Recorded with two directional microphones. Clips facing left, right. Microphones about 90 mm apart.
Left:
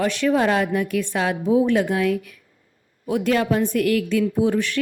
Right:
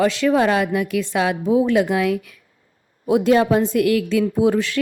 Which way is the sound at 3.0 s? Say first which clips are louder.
Right 5 dB; 25° right (ahead or behind).